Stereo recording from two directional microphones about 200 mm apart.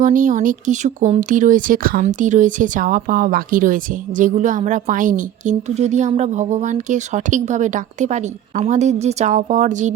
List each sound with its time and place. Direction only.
0.0 s speech: 40° right (ahead or behind)